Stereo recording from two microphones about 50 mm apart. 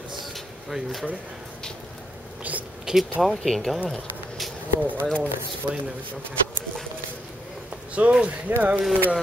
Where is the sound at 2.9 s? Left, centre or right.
Centre.